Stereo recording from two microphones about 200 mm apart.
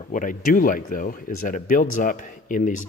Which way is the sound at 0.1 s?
40° left (ahead or behind).